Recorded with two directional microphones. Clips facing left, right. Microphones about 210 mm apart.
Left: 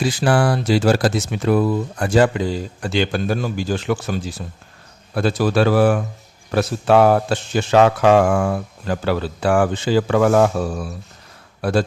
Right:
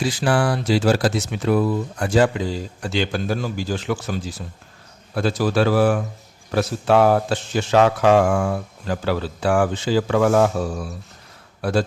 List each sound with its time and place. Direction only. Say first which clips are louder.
0.0 s speech: left 2 dB; 50° left (ahead or behind)
5.1 s speech: left 2 dB; 60° left (ahead or behind)